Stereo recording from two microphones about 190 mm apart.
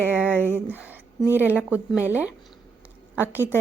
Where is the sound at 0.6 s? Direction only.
10° right (ahead or behind).